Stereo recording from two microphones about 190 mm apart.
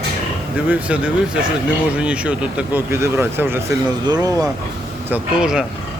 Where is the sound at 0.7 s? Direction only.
5° right (ahead or behind).